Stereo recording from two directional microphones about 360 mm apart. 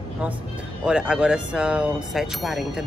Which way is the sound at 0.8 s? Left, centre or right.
Centre.